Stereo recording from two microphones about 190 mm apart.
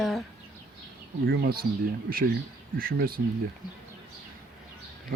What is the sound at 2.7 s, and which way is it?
Speech, 50° right (ahead or behind).